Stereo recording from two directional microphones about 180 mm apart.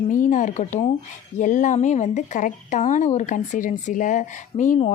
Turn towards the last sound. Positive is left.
turn(degrees=45)  # may be behind; listen again after turning